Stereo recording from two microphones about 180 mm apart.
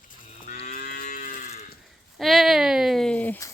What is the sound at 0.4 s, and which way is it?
Moo, 40° left (ahead or behind).